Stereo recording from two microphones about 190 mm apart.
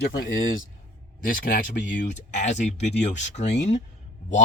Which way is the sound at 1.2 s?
45° left (ahead or behind).